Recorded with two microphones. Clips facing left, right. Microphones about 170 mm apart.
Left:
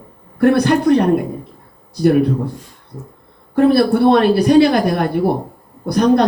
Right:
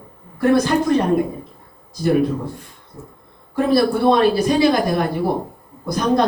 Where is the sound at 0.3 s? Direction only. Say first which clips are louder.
Left 3 dB; 65° left (ahead or behind).